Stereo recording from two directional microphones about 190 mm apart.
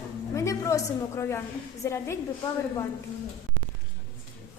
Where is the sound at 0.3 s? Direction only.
15° left (ahead or behind).